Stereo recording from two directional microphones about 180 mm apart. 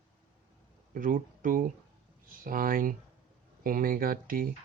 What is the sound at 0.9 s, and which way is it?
Speech, 50° right (ahead or behind).